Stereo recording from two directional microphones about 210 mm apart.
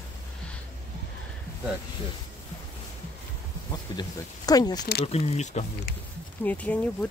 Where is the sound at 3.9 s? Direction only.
20° left (ahead or behind).